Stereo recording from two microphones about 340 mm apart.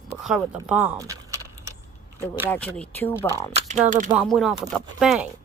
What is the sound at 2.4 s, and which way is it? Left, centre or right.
Speech, centre.